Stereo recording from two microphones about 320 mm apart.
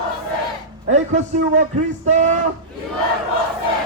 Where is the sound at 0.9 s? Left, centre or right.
Right.